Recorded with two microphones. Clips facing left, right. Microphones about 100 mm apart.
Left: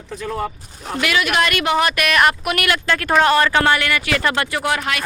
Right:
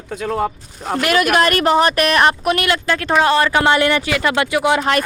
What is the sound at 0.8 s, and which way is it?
Speech, 45° right (ahead or behind).